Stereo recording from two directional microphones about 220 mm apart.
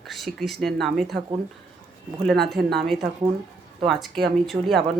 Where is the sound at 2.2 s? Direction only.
Centre (ahead or behind).